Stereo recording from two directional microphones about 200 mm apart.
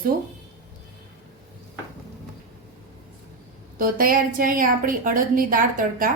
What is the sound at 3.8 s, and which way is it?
A woman's voice, 45° right (ahead or behind).